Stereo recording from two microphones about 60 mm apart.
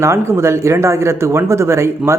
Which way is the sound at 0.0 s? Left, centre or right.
Right.